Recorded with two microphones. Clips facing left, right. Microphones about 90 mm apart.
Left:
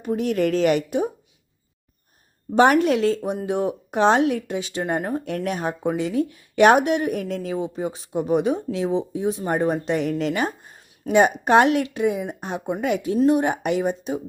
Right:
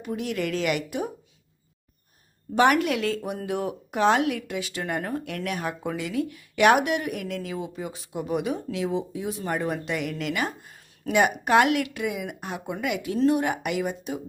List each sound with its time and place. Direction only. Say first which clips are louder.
0.0 s speech: left 7 dB; 40° left (ahead or behind)
2.6 s speech: left 4 dB; 30° left (ahead or behind)
3.2 s speech: left 5 dB; 15° left (ahead or behind)
3.4 s speech: left 5 dB; 25° left (ahead or behind)